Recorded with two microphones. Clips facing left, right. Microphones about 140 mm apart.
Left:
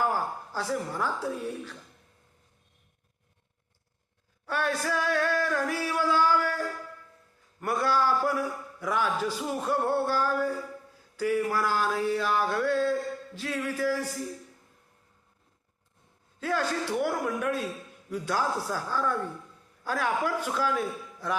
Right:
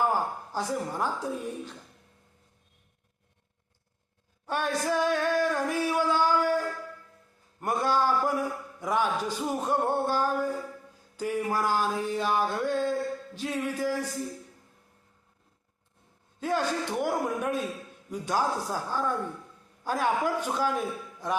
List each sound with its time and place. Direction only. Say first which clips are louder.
0.0 s a woman's voice: right 1 dB; 20° right (ahead or behind)
4.4 s a sound: right 1 dB; 20° right (ahead or behind)
7.6 s a man's voice: even; 20° right (ahead or behind)
16.4 s a man's voice: right 1 dB; 20° right (ahead or behind)